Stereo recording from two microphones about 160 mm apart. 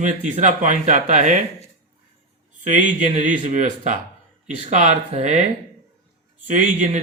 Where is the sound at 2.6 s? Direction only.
50° right (ahead or behind).